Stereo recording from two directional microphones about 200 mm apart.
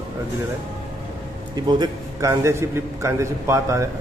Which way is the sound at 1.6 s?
20° right (ahead or behind).